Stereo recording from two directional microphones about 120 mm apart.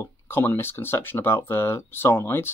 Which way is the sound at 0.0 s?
20° left (ahead or behind).